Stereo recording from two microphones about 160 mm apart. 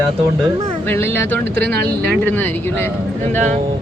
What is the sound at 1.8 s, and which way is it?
Speech, 10° left (ahead or behind).